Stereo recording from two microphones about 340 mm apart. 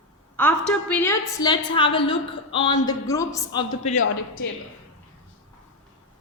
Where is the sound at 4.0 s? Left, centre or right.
Left.